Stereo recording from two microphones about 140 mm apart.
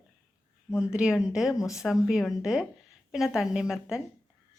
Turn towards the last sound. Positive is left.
turn(degrees=-5)  # may be behind; listen again after turning